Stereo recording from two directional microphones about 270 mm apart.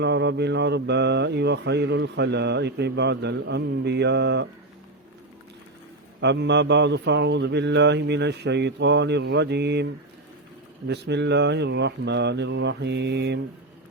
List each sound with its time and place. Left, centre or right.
0.0 s mantra: right
6.1 s mantra: right
10.8 s mantra: right